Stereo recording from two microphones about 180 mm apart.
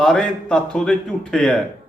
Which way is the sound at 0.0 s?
5° left (ahead or behind).